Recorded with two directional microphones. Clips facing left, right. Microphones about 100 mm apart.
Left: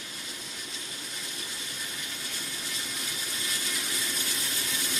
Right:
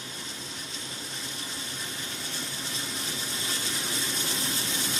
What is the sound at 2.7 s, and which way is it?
Pump, 30° right (ahead or behind).